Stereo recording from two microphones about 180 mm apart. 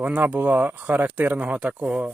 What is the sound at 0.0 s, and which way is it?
Speech, 10° right (ahead or behind).